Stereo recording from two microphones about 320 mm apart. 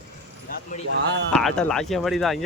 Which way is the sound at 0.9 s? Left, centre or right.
Right.